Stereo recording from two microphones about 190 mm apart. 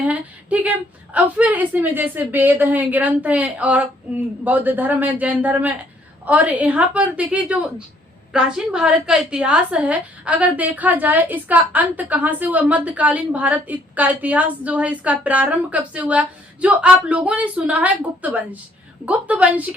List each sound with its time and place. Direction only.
0.0 s a woman's voice: 5° right (ahead or behind)